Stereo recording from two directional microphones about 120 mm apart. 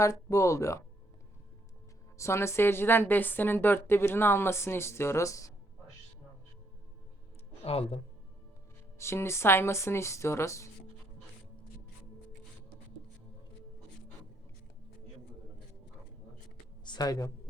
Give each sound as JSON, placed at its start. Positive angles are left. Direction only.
{"t": 0.0, "sound": "a woman's voice", "side_deg": 25}
{"t": 2.1, "sound": "a woman's voice", "side_deg": 25}
{"t": 7.6, "sound": "speech", "side_deg": 55}
{"t": 9.0, "sound": "a woman's voice", "side_deg": 20}
{"t": 16.8, "sound": "speech", "side_deg": 35}